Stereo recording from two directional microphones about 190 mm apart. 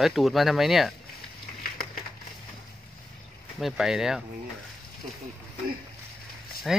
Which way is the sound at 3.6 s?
Centre (ahead or behind).